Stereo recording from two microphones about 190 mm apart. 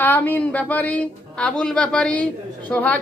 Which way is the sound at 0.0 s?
10° left (ahead or behind).